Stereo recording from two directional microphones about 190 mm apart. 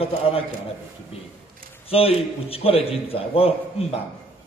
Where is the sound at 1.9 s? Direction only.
30° left (ahead or behind).